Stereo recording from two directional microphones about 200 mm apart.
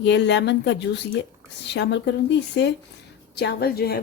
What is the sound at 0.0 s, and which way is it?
A woman's voice, 60° left (ahead or behind).